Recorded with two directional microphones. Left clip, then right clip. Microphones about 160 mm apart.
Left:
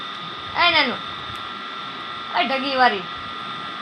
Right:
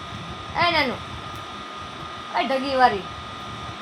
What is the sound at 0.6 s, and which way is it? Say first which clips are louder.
Speech: left 3 dB; 10° right (ahead or behind).